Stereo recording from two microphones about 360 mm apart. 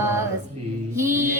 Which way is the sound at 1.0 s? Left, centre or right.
Right.